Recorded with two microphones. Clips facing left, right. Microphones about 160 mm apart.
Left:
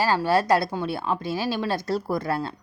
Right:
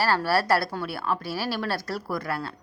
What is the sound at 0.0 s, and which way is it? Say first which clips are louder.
A woman's voice: left 2 dB; 20° left (ahead or behind).